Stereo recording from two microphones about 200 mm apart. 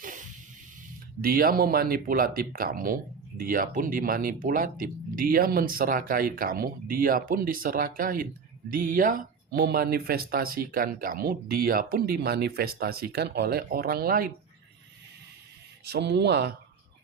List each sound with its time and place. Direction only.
0.0 s music: 40° right (ahead or behind)
1.2 s speech: 45° right (ahead or behind)
15.8 s speech: 55° right (ahead or behind)